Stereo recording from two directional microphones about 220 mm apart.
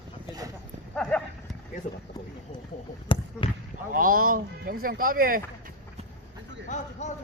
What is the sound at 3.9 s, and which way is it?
Speech, 40° right (ahead or behind).